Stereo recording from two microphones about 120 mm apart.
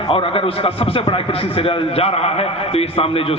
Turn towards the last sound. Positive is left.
turn(degrees=50)  # may be behind; listen again after turning